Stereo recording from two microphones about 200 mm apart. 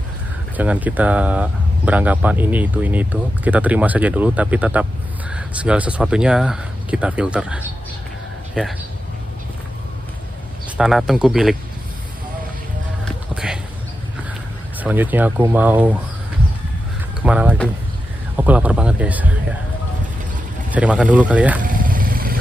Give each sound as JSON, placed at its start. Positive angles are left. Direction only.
{"t": 0.6, "sound": "speech", "side_deg": -10}
{"t": 10.8, "sound": "speech", "side_deg": 0}
{"t": 13.3, "sound": "clip-clop", "side_deg": -5}
{"t": 14.8, "sound": "speech", "side_deg": -10}
{"t": 17.2, "sound": "speech", "side_deg": -5}
{"t": 20.7, "sound": "speech", "side_deg": -5}
{"t": 21.6, "sound": "vehicle", "side_deg": -45}